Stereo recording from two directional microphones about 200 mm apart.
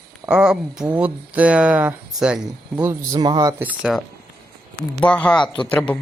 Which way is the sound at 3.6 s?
5° right (ahead or behind).